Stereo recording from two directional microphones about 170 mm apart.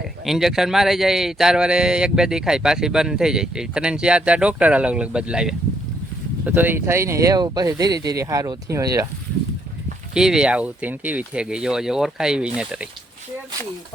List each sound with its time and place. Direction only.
0.3 s speech: centre (ahead or behind); by 9.0 s 20° right (ahead or behind)
10.2 s speech: 5° right (ahead or behind)